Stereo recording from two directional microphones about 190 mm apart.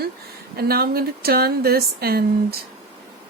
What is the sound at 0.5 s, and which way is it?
Speech, 55° right (ahead or behind).